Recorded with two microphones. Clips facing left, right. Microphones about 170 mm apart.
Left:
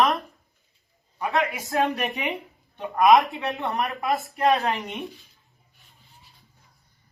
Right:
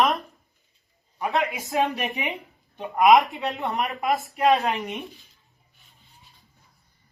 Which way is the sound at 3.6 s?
20° right (ahead or behind).